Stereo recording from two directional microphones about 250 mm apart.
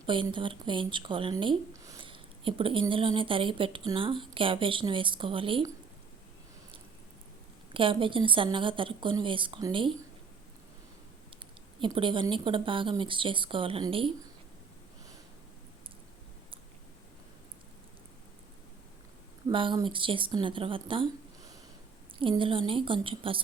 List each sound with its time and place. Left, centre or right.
0.0 s speech: centre
7.7 s speech: right
11.8 s speech: centre
19.5 s speech: centre